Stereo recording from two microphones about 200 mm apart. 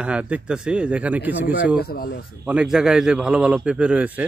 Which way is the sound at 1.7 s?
50° left (ahead or behind).